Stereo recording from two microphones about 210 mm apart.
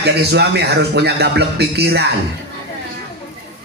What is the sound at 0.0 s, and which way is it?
Speech, 50° right (ahead or behind).